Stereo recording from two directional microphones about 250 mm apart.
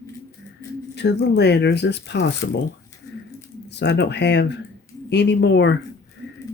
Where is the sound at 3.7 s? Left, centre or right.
Left.